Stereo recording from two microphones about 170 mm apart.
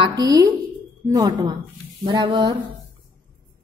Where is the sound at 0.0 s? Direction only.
25° right (ahead or behind).